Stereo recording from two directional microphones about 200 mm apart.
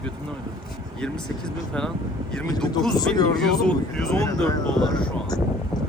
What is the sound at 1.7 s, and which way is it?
Speech, 5° left (ahead or behind).